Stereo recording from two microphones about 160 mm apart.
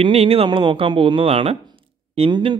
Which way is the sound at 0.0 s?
35° right (ahead or behind).